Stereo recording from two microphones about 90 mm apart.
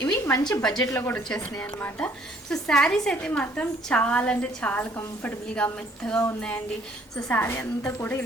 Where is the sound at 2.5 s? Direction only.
5° left (ahead or behind).